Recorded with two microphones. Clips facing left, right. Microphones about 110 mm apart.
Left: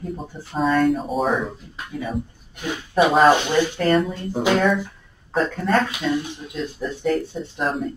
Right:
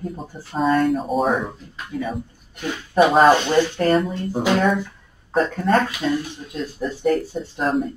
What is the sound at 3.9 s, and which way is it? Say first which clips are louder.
Speech: even; centre (ahead or behind).